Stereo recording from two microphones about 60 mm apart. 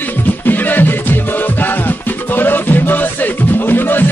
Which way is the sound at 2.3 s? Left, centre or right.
Left.